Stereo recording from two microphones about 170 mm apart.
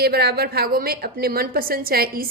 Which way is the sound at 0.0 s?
70° right (ahead or behind).